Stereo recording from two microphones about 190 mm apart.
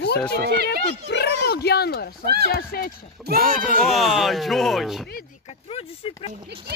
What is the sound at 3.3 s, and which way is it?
Speech, 50° right (ahead or behind).